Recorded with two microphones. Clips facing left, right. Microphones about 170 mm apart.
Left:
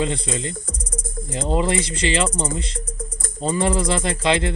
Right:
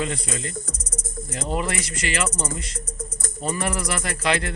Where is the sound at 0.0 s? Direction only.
25° left (ahead or behind).